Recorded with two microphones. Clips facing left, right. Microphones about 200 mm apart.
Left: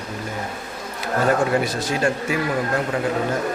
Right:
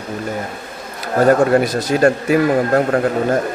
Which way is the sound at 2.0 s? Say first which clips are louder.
Right 10 dB; 60° right (ahead or behind).